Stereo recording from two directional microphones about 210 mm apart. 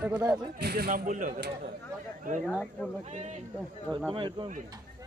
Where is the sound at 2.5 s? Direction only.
5° left (ahead or behind).